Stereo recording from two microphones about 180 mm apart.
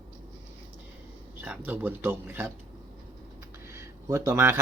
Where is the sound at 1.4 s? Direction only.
10° right (ahead or behind).